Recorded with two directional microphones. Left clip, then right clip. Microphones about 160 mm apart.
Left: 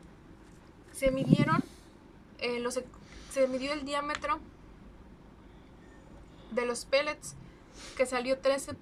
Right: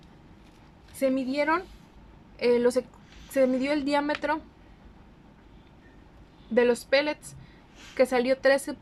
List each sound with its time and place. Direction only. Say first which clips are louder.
0.9 s a woman's voice: right 2 dB; 45° right (ahead or behind)
6.5 s a woman's voice: right 7 dB; 50° right (ahead or behind)